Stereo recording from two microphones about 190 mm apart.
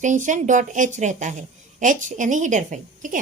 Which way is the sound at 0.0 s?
40° right (ahead or behind).